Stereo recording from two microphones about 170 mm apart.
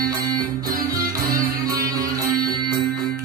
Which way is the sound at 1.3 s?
20° right (ahead or behind).